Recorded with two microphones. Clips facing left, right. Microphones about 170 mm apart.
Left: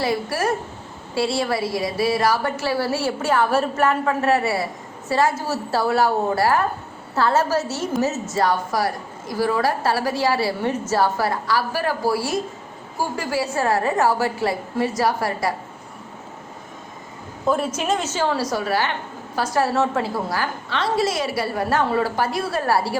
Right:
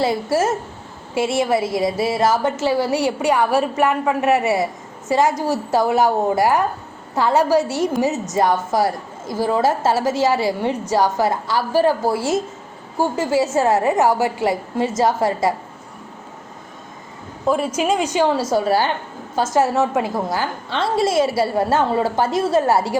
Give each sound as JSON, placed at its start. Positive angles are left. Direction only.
{"t": 0.0, "sound": "a woman's voice", "side_deg": -25}
{"t": 17.4, "sound": "a woman's voice", "side_deg": -5}